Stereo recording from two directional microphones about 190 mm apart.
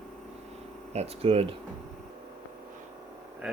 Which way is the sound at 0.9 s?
30° right (ahead or behind).